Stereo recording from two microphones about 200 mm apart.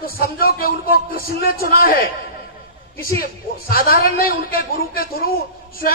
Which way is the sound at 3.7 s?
45° left (ahead or behind).